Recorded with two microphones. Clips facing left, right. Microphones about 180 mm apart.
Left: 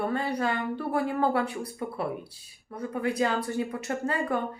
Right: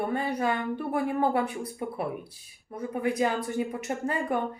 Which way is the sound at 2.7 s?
20° right (ahead or behind).